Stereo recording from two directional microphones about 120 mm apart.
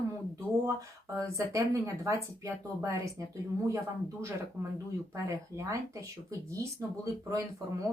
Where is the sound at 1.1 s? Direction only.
25° right (ahead or behind).